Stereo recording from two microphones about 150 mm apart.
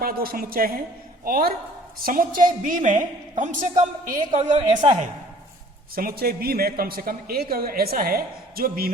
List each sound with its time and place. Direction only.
0.0 s a man's voice: 85° right
2.0 s a woman's voice: 65° right (ahead or behind)
4.5 s a woman's voice: 30° right (ahead or behind)
5.9 s a man's voice: 80° right